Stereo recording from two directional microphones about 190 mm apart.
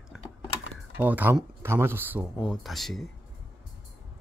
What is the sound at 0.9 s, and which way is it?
Speech, 10° right (ahead or behind).